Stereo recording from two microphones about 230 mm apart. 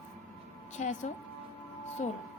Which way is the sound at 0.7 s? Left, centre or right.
Left.